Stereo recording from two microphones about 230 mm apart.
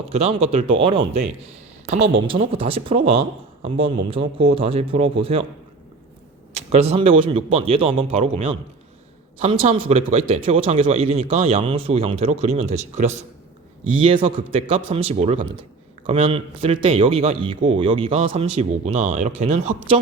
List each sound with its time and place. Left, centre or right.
0.1 s speech: right
6.6 s speech: right